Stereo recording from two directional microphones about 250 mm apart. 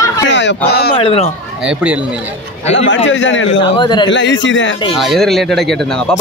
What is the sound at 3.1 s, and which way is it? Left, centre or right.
Speech, left.